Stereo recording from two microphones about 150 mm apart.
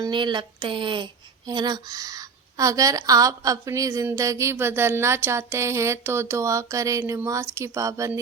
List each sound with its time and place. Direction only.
0.0 s a woman's voice: 30° right (ahead or behind)